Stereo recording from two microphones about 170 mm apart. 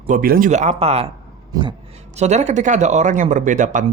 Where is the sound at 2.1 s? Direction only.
40° right (ahead or behind).